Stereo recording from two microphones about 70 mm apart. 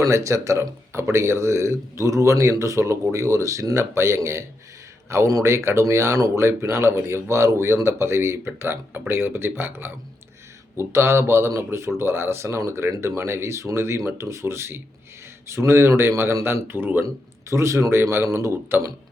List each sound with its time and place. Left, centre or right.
0.0 s a man's voice: right
17.5 s speech: right